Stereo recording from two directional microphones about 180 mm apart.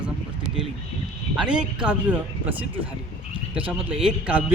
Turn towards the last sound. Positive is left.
turn(degrees=-5)  # may be behind; listen again after turning